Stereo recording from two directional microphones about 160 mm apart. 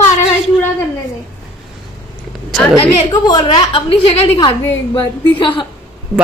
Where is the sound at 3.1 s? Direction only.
25° left (ahead or behind).